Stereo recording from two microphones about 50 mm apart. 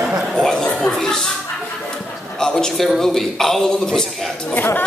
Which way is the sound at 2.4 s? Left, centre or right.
Centre.